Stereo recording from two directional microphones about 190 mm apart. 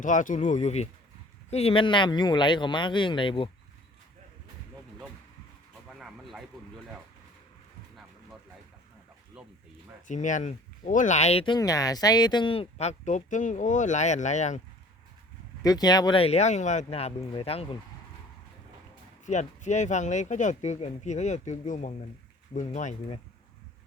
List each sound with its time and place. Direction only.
0.0 s speech: 40° left (ahead or behind); by 3.5 s 25° left (ahead or behind)
6.0 s a sound: centre (ahead or behind)
10.1 s speech: 40° left (ahead or behind)
15.6 s speech: 20° left (ahead or behind)
19.2 s speech: 40° left (ahead or behind)